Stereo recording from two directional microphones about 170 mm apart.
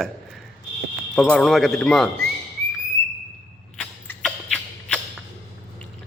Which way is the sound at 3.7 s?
10° left (ahead or behind).